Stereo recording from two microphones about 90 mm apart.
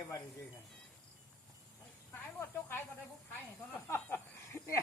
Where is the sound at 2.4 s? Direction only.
25° left (ahead or behind).